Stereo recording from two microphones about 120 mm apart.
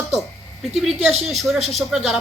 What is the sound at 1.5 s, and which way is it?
Speech, 65° right (ahead or behind).